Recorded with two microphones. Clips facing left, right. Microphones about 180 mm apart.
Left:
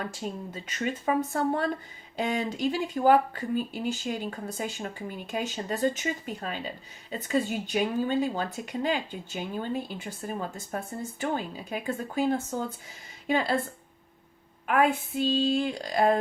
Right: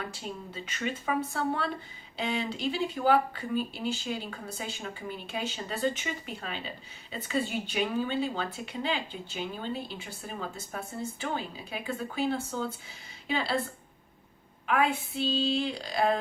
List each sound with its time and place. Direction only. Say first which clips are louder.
0.1 s speech: left 4 dB; 45° left (ahead or behind)
14.7 s speech: left 3 dB; 45° left (ahead or behind)